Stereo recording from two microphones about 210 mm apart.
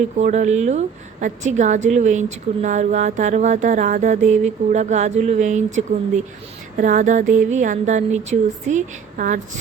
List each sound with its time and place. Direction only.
0.2 s a woman's voice: 35° right (ahead or behind)